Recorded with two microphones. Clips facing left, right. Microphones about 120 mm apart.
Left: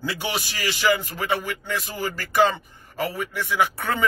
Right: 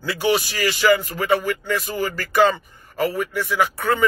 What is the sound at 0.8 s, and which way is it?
Speech, 15° left (ahead or behind).